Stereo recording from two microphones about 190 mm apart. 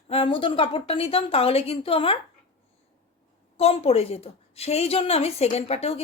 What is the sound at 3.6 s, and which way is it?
Speech, 30° left (ahead or behind).